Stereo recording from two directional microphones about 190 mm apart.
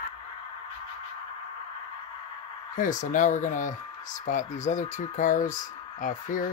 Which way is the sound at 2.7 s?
45° left (ahead or behind).